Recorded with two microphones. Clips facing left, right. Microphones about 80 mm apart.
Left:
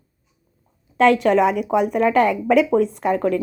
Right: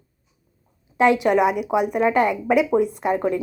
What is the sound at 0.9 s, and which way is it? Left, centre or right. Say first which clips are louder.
A woman's voice: left 2 dB; centre.